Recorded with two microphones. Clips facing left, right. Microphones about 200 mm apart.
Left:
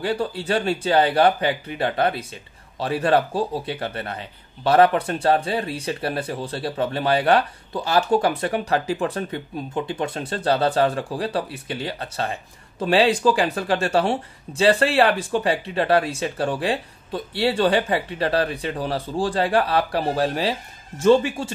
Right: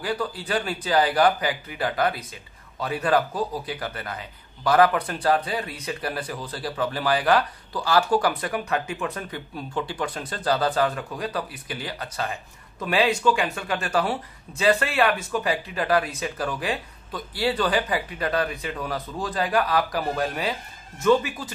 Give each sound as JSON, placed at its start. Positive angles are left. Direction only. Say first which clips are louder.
{"t": 0.0, "sound": "speech", "louder": "left 4 dB", "side_deg": 25}